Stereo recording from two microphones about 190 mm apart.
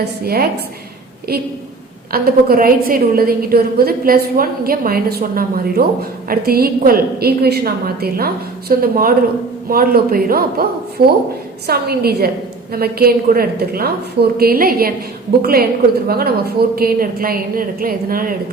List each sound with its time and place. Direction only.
0.0 s a woman's voice: 55° right (ahead or behind)